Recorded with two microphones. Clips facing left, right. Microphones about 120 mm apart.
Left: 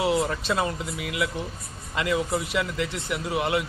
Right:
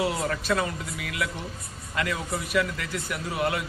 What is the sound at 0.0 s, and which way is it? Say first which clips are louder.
Speech: left 3 dB; 20° left (ahead or behind).